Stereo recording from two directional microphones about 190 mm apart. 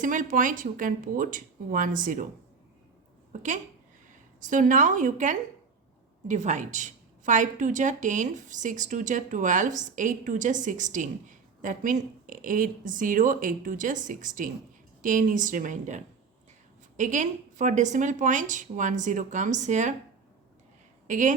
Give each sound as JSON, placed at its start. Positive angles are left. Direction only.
{"t": 0.0, "sound": "a woman's voice", "side_deg": -45}
{"t": 3.3, "sound": "a woman's voice", "side_deg": -40}
{"t": 21.1, "sound": "a woman's voice", "side_deg": -40}